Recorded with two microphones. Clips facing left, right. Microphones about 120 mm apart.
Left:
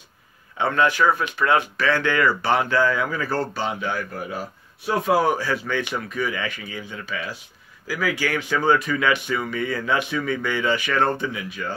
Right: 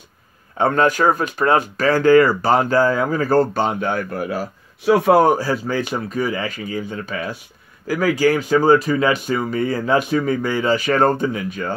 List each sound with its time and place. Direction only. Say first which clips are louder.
0.6 s speech: right 4 dB; 45° right (ahead or behind)
4.1 s speech: right 6 dB; 85° right
5.2 s speech: right 6 dB; 40° right (ahead or behind)